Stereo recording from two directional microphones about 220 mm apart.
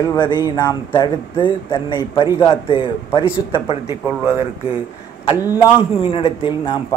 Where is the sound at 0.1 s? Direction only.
20° left (ahead or behind).